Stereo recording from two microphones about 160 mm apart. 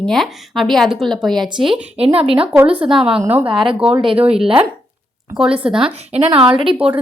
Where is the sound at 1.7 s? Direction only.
35° right (ahead or behind).